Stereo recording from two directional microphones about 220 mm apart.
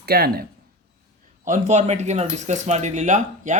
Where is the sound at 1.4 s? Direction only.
35° right (ahead or behind).